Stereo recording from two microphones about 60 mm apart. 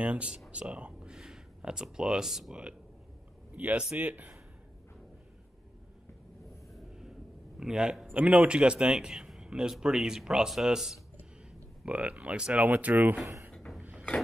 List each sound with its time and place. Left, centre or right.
0.0 s speech: right
3.5 s speech: right
6.7 s a sound: centre
8.2 s a man's voice: right; by 11.0 s centre
11.8 s speech: right